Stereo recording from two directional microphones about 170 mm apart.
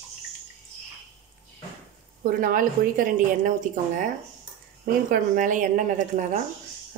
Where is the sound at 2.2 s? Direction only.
55° right (ahead or behind).